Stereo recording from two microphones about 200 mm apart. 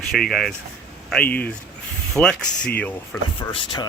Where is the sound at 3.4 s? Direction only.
20° left (ahead or behind).